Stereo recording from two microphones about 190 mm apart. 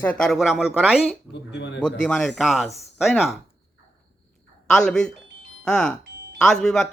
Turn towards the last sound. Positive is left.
turn(degrees=5)  # may be behind; listen again after turning